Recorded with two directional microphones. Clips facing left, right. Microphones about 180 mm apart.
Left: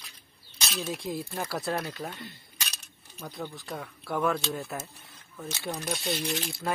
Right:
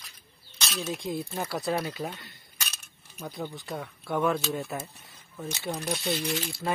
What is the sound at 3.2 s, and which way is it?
Speech, 5° right (ahead or behind).